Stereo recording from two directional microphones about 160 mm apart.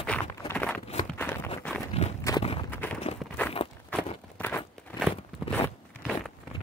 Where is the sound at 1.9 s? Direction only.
40° left (ahead or behind).